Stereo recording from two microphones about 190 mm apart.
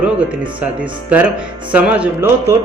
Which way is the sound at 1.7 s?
10° right (ahead or behind).